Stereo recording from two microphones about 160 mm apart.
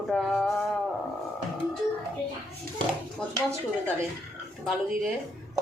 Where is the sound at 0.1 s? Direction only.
5° left (ahead or behind).